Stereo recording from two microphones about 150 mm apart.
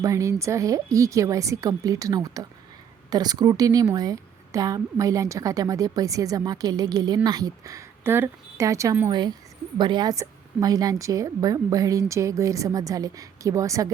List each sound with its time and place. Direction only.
0.0 s a woman's voice: 20° right (ahead or behind)